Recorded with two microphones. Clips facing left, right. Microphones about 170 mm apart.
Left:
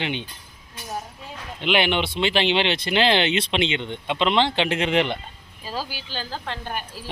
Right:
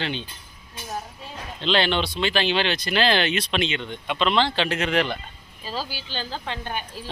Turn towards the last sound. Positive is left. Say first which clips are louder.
# even
turn(degrees=5)  # may be behind; listen again after turning